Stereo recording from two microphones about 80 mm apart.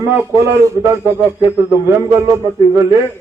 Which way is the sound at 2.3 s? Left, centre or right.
Right.